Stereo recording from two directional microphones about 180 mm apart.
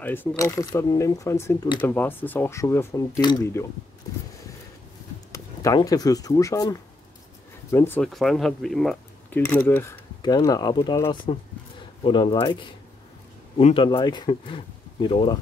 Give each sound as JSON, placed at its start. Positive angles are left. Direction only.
{"t": 0.0, "sound": "speech", "side_deg": 10}
{"t": 5.3, "sound": "speech", "side_deg": 20}
{"t": 8.1, "sound": "speech", "side_deg": 0}
{"t": 9.4, "sound": "speech", "side_deg": 15}
{"t": 13.8, "sound": "speech", "side_deg": 25}